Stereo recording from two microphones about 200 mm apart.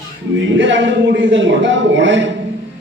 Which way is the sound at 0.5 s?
65° right (ahead or behind).